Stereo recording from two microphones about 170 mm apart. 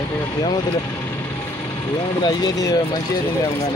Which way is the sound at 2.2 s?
20° left (ahead or behind).